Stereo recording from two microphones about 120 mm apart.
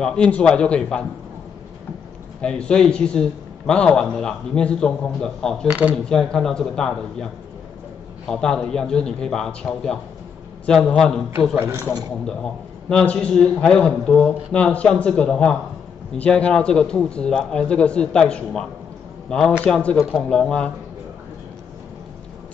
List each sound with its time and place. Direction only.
0.0 s a man's voice: 5° left (ahead or behind)
2.4 s a man's voice: 10° left (ahead or behind)
5.7 s speech: 10° right (ahead or behind)
6.0 s a man's voice: 5° left (ahead or behind)
8.3 s a man's voice: 5° left (ahead or behind)
11.5 s a man's voice: 20° right (ahead or behind)
12.9 s a man's voice: 10° left (ahead or behind)
20.0 s a man's voice: 5° right (ahead or behind)
20.2 s a man's voice: 5° left (ahead or behind)